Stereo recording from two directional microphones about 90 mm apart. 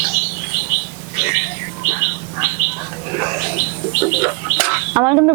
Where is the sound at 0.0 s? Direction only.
20° right (ahead or behind).